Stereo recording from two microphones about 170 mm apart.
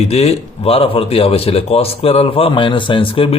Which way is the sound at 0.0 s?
40° left (ahead or behind).